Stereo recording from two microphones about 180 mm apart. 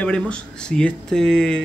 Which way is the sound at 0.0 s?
5° left (ahead or behind).